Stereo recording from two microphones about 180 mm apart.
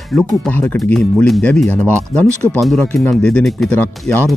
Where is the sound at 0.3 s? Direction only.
10° left (ahead or behind).